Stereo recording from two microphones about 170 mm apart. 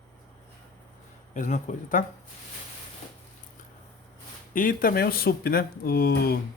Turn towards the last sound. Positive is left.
turn(degrees=60)  # may be behind; listen again after turning